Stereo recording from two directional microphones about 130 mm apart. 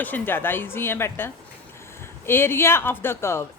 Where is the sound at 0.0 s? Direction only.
15° left (ahead or behind).